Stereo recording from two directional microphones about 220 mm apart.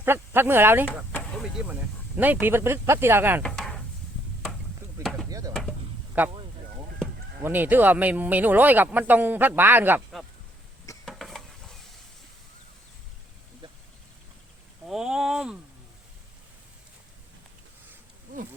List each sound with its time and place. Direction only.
0.0 s speech: 10° right (ahead or behind)
1.1 s speech: 5° left (ahead or behind)
3.4 s a sound: centre (ahead or behind)
5.3 s a sound: 15° right (ahead or behind)
6.2 s speech: 10° right (ahead or behind)
7.4 s speech: 10° right (ahead or behind)
11.0 s stir: centre (ahead or behind)
13.6 s vehicle: 25° right (ahead or behind)
14.8 s a sound: centre (ahead or behind)